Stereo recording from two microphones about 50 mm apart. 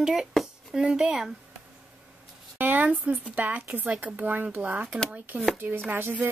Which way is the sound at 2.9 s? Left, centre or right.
Right.